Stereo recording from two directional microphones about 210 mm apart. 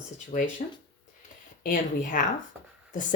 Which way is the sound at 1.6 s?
40° left (ahead or behind).